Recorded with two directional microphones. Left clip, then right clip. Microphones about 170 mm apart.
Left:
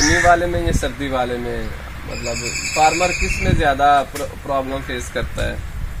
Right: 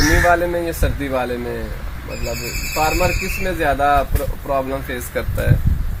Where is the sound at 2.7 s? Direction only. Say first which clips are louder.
Left 3 dB; 15° right (ahead or behind).